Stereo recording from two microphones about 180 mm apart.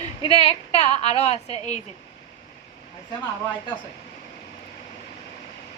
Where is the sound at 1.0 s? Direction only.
35° left (ahead or behind).